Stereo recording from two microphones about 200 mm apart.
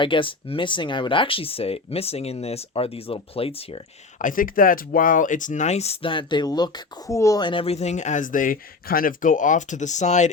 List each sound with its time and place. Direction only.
0.0 s speech: 25° left (ahead or behind)
4.2 s speech: 45° left (ahead or behind)